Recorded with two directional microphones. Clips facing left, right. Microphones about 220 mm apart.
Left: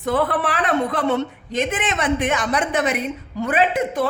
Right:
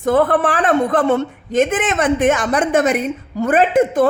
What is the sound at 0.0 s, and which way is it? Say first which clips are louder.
A woman's voice: right 6 dB; 45° right (ahead or behind).